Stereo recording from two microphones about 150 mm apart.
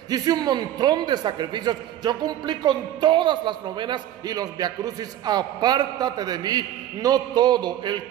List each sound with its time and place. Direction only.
0.1 s a man's voice: 25° right (ahead or behind)